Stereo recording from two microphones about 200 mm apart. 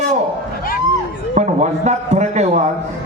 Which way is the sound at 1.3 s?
35° right (ahead or behind).